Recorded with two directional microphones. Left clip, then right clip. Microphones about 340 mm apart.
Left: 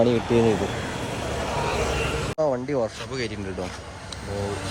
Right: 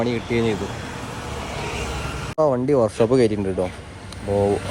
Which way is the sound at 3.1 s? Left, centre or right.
Centre.